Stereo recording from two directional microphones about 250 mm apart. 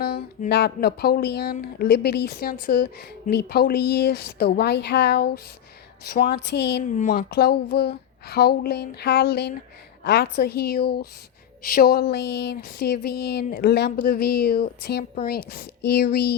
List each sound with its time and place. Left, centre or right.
0.0 s speech: left
6.8 s speech: left